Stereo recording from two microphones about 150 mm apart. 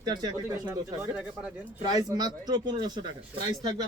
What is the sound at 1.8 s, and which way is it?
A man's voice, 25° right (ahead or behind).